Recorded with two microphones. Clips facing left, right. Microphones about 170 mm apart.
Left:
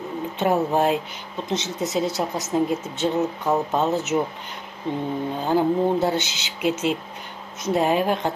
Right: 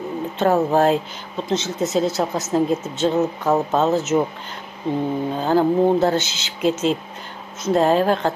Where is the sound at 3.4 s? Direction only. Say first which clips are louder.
Right 3 dB; 45° right (ahead or behind).